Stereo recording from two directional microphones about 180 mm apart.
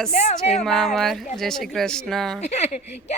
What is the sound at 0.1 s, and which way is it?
Speech, 40° left (ahead or behind).